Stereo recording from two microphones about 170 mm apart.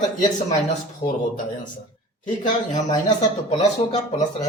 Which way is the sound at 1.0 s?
15° left (ahead or behind).